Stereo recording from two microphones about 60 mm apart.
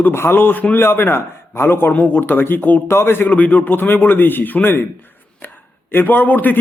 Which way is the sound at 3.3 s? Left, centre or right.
Left.